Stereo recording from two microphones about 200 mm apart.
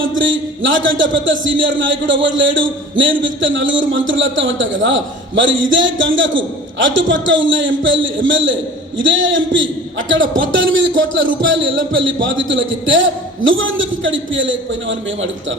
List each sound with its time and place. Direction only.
0.0 s a man's voice: 70° right (ahead or behind)